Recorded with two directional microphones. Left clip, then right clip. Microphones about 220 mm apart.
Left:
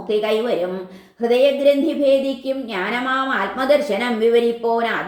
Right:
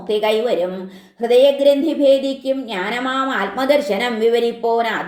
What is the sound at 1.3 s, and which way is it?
A woman's voice, 30° right (ahead or behind).